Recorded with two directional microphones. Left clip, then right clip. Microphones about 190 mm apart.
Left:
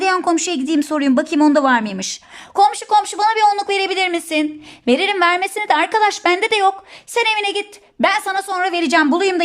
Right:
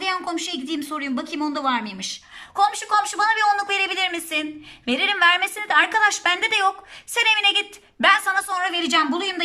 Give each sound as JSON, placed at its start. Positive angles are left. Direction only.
{"t": 0.0, "sound": "a woman's voice", "side_deg": 35}